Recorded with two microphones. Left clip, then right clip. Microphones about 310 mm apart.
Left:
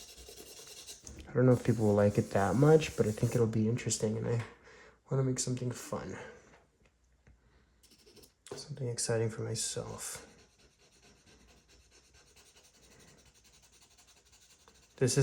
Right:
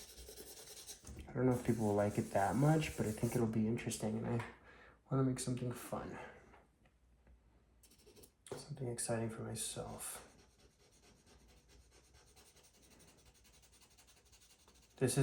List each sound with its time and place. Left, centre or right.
1.2 s speech: left
9.0 s speech: left